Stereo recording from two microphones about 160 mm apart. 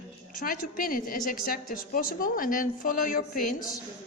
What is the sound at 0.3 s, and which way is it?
A woman's voice, 60° left (ahead or behind).